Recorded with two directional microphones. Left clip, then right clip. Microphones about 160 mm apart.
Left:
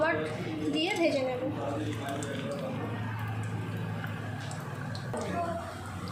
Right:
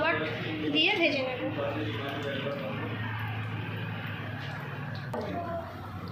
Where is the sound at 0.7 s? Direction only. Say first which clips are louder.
Right 3 dB; 55° left (ahead or behind).